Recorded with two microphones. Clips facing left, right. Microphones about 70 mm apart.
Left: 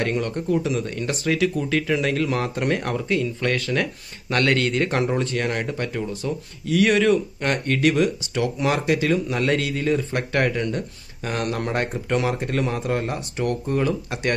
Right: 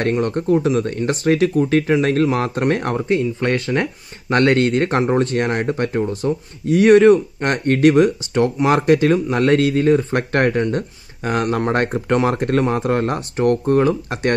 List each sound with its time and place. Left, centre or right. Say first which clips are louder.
0.0 s speech: right 5 dB; right